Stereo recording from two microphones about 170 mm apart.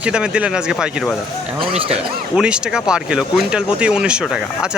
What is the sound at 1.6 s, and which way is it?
Speech, 35° right (ahead or behind).